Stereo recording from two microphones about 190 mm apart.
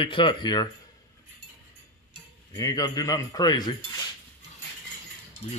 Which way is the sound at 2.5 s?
20° left (ahead or behind).